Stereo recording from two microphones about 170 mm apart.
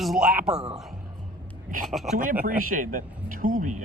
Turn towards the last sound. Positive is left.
turn(degrees=-55)  # may be behind; listen again after turning